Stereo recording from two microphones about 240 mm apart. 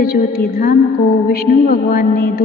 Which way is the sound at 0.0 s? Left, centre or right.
Left.